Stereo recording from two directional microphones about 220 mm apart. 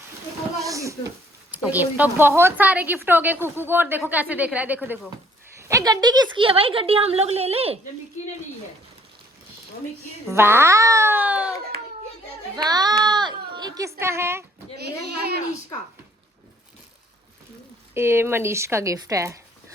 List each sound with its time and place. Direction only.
0.6 s a sound: 15° right (ahead or behind)
1.5 s a woman's voice: 5° right (ahead or behind); by 7.8 s 25° right (ahead or behind)
10.2 s a woman's voice: 10° right (ahead or behind)
12.6 s a woman's voice: 20° right (ahead or behind)
14.8 s speech: 45° right (ahead or behind)
17.9 s a woman's voice: 10° right (ahead or behind)